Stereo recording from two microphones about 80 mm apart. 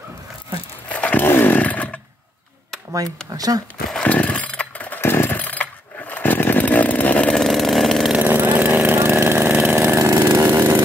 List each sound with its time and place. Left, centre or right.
0.9 s chainsaw: centre
3.3 s speech: right
4.0 s chainsaw: centre
7.4 s vehicle: centre
8.2 s chainsaw: right
8.8 s vehicle: right
10.0 s chainsaw: right